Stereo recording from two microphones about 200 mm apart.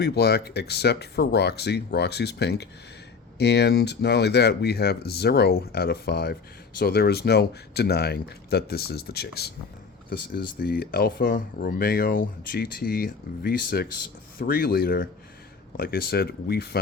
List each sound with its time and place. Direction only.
0.0 s speech: 55° left (ahead or behind)